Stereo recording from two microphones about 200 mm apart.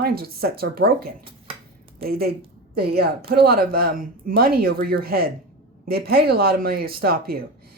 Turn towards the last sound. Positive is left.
turn(degrees=-50)  # may be behind; listen again after turning